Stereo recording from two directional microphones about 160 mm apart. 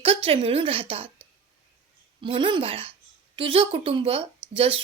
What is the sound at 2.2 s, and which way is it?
A woman's voice, 30° right (ahead or behind).